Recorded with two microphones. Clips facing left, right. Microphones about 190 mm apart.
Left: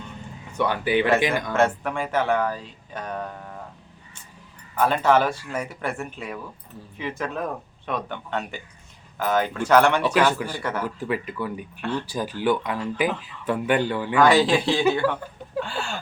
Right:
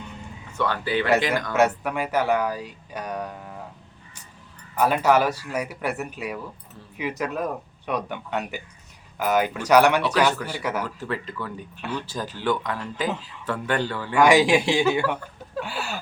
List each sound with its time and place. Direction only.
0.5 s speech: 15° left (ahead or behind)
1.5 s speech: 5° right (ahead or behind)
4.8 s speech: 5° right (ahead or behind)
10.8 s speech: 15° left (ahead or behind)
14.2 s speech: 10° right (ahead or behind)